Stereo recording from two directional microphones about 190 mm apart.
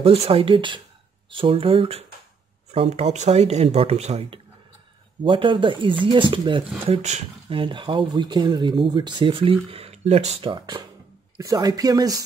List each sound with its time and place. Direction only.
0.0 s speech: 30° right (ahead or behind)